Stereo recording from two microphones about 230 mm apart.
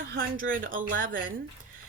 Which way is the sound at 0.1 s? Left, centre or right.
Right.